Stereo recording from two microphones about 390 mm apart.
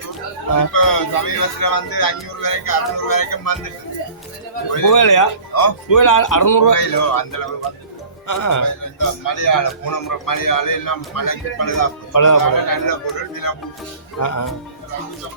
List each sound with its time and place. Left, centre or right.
0.5 s speech: left
4.7 s speech: left
8.3 s speech: left